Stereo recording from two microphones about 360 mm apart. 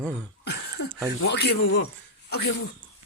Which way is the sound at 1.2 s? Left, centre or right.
Left.